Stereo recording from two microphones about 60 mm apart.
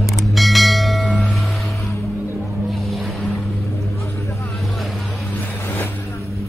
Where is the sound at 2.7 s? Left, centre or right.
Centre.